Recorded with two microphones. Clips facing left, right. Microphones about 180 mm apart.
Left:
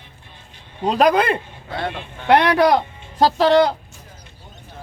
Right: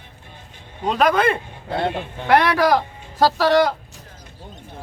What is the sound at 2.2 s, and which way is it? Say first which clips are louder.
A man's voice: left 2 dB; 25° left (ahead or behind).